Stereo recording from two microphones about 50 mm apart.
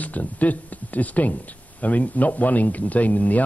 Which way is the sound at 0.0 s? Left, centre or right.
Left.